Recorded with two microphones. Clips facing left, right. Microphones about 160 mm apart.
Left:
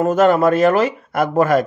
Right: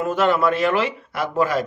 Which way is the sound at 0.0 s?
45° left (ahead or behind).